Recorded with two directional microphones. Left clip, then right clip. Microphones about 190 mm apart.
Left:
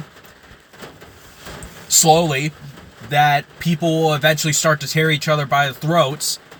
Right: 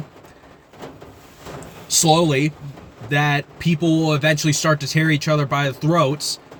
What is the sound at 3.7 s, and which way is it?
Speech, 20° right (ahead or behind).